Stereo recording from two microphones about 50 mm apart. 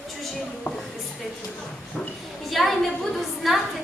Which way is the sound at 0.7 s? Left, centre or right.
Left.